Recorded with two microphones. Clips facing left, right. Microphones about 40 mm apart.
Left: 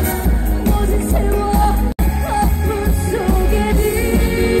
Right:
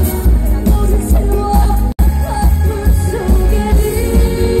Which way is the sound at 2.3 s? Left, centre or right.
Left.